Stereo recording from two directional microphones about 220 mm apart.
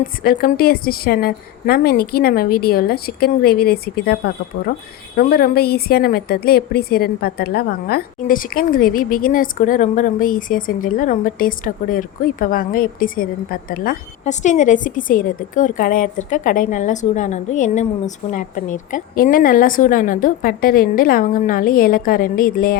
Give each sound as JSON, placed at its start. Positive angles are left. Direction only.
{"t": 0.2, "sound": "a woman's voice", "side_deg": 40}